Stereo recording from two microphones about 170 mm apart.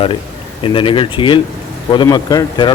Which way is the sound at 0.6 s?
30° left (ahead or behind).